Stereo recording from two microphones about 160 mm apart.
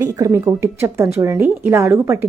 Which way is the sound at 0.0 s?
20° right (ahead or behind).